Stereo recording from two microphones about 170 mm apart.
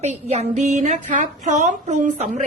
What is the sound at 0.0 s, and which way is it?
A woman's voice, 40° right (ahead or behind).